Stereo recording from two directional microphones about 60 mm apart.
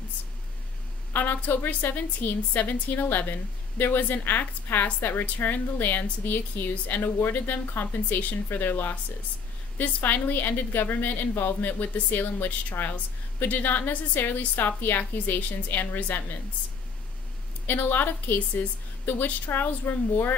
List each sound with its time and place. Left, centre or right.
1.1 s a woman's voice: left
17.6 s a woman's voice: left